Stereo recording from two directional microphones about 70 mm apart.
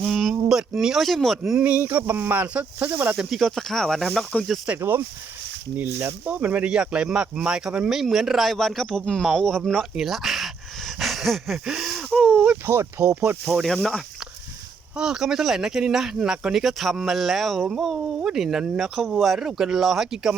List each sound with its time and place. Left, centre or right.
0.0 s a sound: centre
0.8 s speech: centre
1.5 s speech: centre
3.2 s speech: centre
4.8 s speech: right; by 9.8 s centre
9.9 s a sound: centre
11.6 s wheeze: centre
12.1 s a sound: centre
12.6 s speech: right
13.4 s speech: centre
14.9 s speech: centre